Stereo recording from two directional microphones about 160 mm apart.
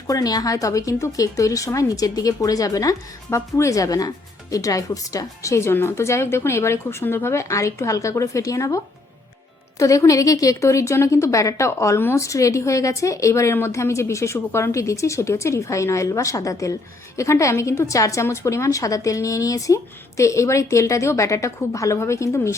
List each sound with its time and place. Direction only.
0.1 s a woman's voice: 25° left (ahead or behind)